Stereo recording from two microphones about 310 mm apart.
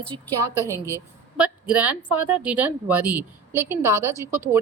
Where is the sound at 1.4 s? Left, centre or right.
Centre.